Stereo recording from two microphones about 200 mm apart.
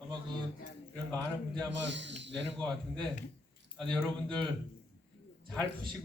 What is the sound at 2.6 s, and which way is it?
Speech, 5° left (ahead or behind).